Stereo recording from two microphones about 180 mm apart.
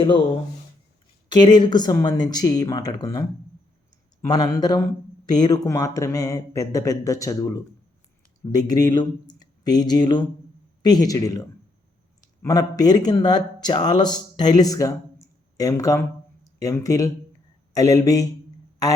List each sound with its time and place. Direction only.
1.3 s speech: 25° left (ahead or behind)
4.3 s speech: 20° left (ahead or behind)
8.5 s speech: 20° left (ahead or behind)